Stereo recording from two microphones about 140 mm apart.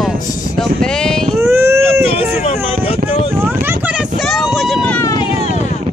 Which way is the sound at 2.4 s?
50° left (ahead or behind).